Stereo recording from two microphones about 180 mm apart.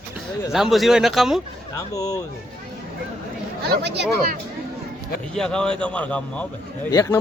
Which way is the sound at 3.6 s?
65° right (ahead or behind).